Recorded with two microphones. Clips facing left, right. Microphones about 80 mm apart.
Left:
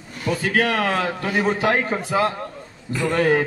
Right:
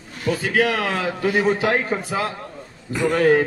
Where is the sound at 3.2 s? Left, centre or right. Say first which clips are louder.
Right 2 dB; centre.